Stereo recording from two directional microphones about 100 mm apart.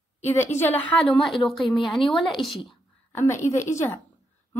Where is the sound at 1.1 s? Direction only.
Centre (ahead or behind).